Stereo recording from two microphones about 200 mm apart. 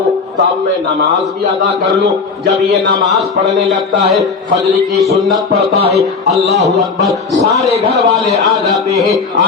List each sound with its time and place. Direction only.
2.5 s a man's voice: 60° right (ahead or behind)
3.1 s a man's voice: centre (ahead or behind)
7.9 s a man's voice: centre (ahead or behind)